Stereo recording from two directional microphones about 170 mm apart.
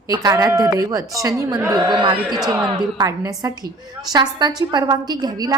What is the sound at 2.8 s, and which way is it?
Speech, 20° right (ahead or behind).